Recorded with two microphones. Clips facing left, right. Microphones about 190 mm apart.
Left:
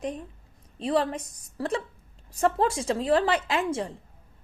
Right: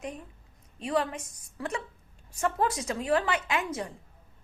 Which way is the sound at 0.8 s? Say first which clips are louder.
Left 4 dB; 35° left (ahead or behind).